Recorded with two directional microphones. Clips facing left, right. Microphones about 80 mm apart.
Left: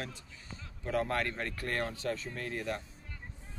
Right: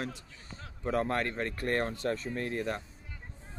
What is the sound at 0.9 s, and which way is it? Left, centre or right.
Speech, right.